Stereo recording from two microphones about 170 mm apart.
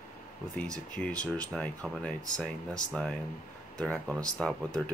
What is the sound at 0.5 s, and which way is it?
Speech, 5° left (ahead or behind).